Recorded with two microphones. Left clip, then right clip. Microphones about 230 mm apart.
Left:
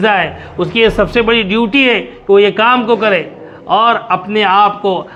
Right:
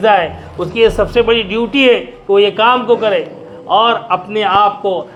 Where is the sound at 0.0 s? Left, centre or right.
Left.